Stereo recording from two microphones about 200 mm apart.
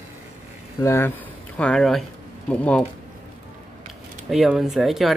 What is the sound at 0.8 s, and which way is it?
Speech, 15° left (ahead or behind).